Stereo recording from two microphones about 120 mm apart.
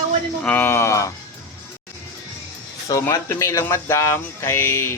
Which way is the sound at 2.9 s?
25° left (ahead or behind).